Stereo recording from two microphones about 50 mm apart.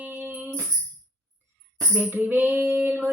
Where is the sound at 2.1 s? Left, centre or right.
Right.